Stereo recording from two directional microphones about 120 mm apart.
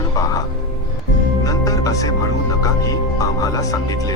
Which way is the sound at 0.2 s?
30° left (ahead or behind).